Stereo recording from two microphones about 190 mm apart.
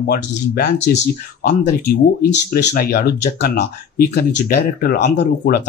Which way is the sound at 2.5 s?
50° left (ahead or behind).